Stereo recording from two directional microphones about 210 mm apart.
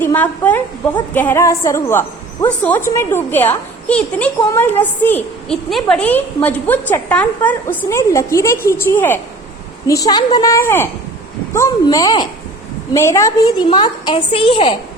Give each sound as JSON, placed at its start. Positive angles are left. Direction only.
{"t": 0.0, "sound": "a woman's voice", "side_deg": 10}